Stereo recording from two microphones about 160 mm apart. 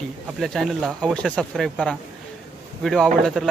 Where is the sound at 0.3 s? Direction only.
Centre (ahead or behind).